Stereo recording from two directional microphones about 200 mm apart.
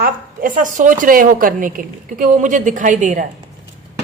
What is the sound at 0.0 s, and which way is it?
A woman's voice, 40° right (ahead or behind).